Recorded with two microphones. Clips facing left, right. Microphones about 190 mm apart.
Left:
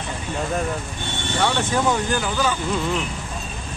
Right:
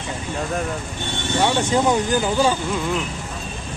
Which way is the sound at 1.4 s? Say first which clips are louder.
Right 2 dB; 20° right (ahead or behind).